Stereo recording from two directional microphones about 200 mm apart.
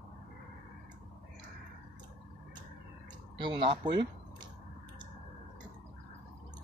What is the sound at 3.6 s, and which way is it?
Speech, 25° right (ahead or behind).